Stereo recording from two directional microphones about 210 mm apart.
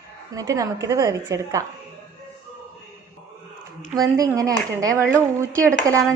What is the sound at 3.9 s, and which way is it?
A woman's voice, 15° right (ahead or behind).